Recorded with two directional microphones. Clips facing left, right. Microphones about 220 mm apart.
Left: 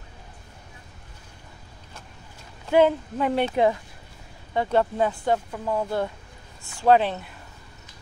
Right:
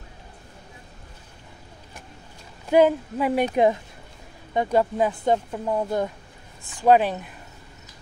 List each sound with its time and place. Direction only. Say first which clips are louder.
2.7 s speech: right 1 dB; 10° right (ahead or behind)
4.6 s speech: right 1 dB; 15° right (ahead or behind)